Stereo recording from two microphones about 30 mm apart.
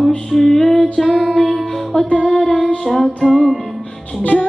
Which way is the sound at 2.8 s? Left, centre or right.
Centre.